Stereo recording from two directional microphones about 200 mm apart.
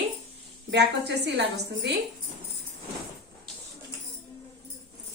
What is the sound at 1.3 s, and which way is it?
Speech, 60° right (ahead or behind).